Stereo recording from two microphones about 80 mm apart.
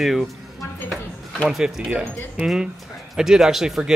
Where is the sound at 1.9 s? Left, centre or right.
Right.